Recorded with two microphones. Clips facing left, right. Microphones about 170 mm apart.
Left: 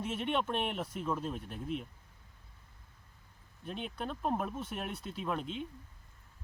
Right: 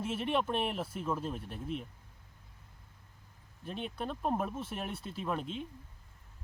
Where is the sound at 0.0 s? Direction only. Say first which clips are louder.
Right 1 dB; 5° right (ahead or behind).